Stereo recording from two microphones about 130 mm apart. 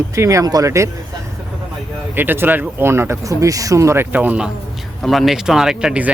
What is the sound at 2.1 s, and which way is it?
Speech, 15° right (ahead or behind).